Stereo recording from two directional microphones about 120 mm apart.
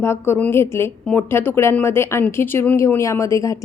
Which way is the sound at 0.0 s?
20° left (ahead or behind).